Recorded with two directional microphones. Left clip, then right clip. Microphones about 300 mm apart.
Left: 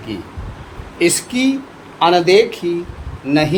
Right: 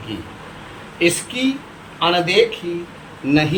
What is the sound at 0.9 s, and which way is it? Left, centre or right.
Speech, centre.